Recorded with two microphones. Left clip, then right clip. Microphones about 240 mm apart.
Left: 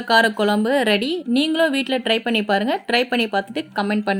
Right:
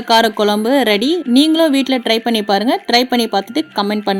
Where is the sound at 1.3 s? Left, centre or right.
Right.